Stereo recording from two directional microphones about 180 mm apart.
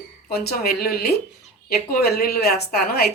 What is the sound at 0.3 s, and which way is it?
A woman's voice, 60° left (ahead or behind).